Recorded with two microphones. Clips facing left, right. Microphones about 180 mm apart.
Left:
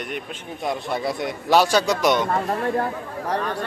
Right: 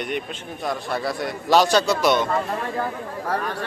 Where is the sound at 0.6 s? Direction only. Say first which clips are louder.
Left 1 dB; 20° left (ahead or behind).